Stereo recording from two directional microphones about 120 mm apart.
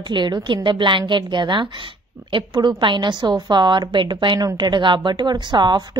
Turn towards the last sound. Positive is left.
turn(degrees=-40)  # may be behind; listen again after turning